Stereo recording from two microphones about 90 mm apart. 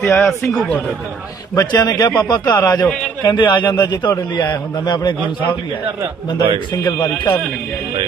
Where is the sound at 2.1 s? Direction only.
55° left (ahead or behind).